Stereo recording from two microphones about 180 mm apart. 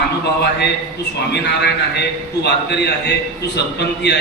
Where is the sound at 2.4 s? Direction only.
70° left (ahead or behind).